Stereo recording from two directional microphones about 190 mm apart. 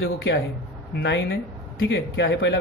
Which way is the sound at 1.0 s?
70° left (ahead or behind).